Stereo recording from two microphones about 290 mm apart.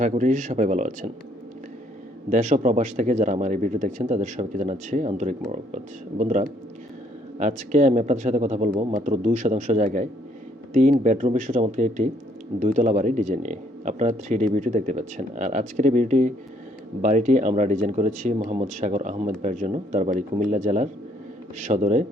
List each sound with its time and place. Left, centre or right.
0.0 s speech: right
2.3 s speech: right